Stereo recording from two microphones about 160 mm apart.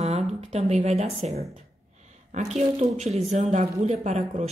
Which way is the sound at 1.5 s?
50° right (ahead or behind).